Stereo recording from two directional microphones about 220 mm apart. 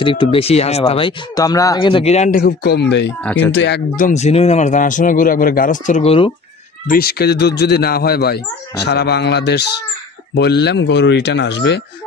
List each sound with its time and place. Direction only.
0.0 s speech: 25° left (ahead or behind)
2.4 s speech: 45° left (ahead or behind)
3.3 s speech: 5° left (ahead or behind)
3.5 s speech: 55° left (ahead or behind)
3.9 s speech: 35° left (ahead or behind)
6.9 s speech: 45° left (ahead or behind)